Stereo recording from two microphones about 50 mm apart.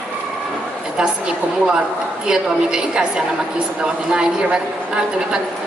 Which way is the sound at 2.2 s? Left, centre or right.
Centre.